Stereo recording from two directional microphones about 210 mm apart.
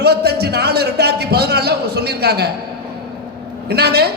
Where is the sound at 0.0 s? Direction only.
50° right (ahead or behind).